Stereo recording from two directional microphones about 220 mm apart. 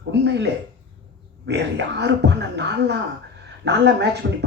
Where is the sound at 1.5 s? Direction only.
50° right (ahead or behind).